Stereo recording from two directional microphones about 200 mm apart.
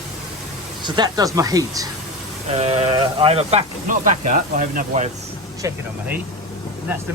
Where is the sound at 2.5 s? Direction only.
35° right (ahead or behind).